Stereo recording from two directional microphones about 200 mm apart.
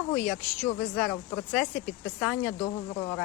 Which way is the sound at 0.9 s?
5° left (ahead or behind).